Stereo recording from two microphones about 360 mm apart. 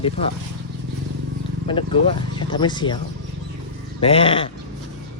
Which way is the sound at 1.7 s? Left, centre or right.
Centre.